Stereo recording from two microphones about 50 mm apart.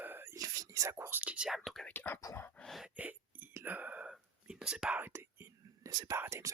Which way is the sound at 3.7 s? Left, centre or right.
Right.